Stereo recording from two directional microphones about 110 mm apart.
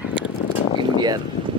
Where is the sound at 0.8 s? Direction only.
40° right (ahead or behind).